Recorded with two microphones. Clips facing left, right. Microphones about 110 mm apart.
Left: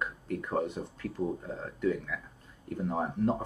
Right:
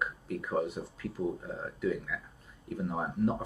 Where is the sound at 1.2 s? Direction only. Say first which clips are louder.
Left 1 dB; 15° left (ahead or behind).